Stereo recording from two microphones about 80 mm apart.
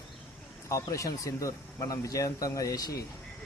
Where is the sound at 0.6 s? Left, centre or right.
Left.